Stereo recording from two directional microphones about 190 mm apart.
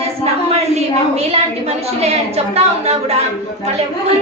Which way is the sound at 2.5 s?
35° right (ahead or behind).